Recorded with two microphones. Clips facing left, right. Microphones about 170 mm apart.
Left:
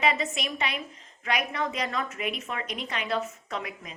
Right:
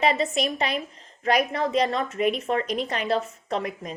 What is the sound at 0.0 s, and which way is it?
A woman's voice, 35° right (ahead or behind).